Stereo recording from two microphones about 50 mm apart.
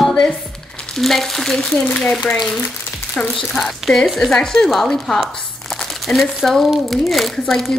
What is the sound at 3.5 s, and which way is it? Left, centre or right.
Speech, centre.